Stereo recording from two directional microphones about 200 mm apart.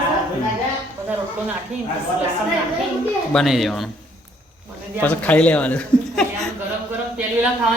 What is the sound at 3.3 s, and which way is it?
Speech, centre (ahead or behind).